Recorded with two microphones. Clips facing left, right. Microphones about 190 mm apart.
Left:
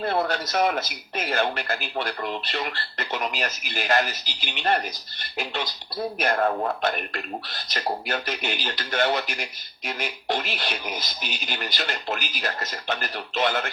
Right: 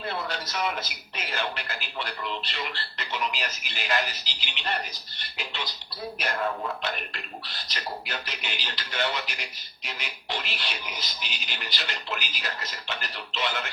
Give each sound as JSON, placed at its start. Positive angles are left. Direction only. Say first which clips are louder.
{"t": 0.0, "sound": "speech", "louder": "left 8 dB", "side_deg": 50}
{"t": 6.1, "sound": "speech", "louder": "left 6 dB", "side_deg": 50}